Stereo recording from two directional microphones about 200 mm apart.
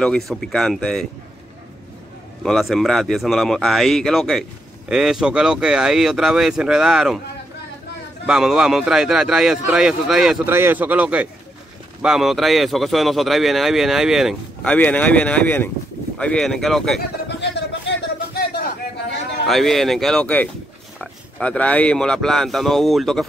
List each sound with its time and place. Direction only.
0.0 s speech: centre (ahead or behind)
2.4 s speech: centre (ahead or behind)
8.3 s speech: centre (ahead or behind)
17.3 s a sound: 60° left (ahead or behind)
19.4 s speech: centre (ahead or behind)